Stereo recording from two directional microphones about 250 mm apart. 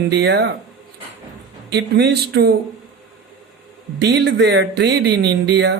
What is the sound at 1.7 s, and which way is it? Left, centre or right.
Speech, right.